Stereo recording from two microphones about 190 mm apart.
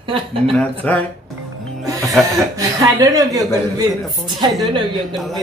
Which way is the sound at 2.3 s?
20° right (ahead or behind).